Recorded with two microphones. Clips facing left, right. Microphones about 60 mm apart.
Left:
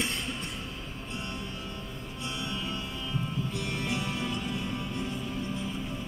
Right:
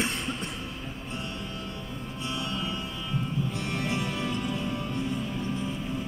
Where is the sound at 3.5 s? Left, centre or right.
Right.